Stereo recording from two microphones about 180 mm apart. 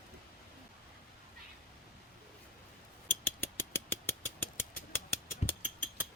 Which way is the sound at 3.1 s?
10° left (ahead or behind).